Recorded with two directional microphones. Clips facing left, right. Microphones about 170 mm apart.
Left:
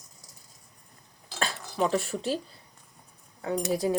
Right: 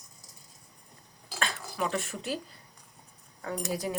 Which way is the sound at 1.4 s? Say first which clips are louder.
Left 4 dB; 35° left (ahead or behind).